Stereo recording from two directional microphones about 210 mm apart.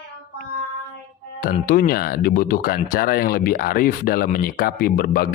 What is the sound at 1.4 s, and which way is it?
Speech, 45° left (ahead or behind).